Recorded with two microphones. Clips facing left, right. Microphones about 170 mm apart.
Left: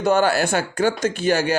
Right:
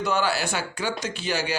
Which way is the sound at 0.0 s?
50° left (ahead or behind).